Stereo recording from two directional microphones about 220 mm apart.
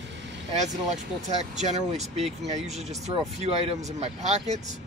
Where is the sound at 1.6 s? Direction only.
30° right (ahead or behind).